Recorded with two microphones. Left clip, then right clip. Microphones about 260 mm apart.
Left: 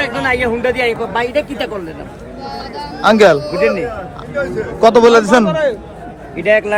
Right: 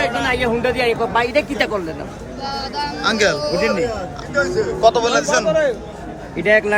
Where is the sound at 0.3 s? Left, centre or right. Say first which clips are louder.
Left 3 dB; centre.